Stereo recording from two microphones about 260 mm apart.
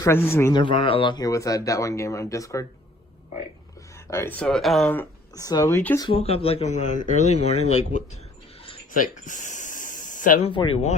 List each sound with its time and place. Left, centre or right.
0.0 s speech: centre
4.1 s speech: centre
6.1 s speech: left
8.6 s a sound: left
10.5 s speech: centre